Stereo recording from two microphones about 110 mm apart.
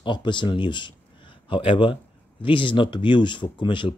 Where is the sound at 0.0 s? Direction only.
45° left (ahead or behind).